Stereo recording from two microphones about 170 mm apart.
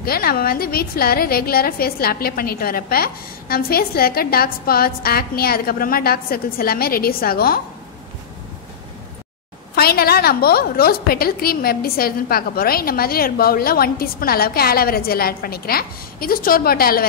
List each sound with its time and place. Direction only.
0.0 s a woman's voice: 65° left (ahead or behind)
9.8 s a woman's voice: 65° left (ahead or behind)